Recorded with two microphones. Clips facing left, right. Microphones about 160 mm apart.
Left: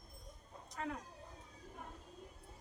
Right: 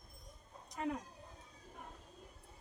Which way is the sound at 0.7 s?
15° right (ahead or behind).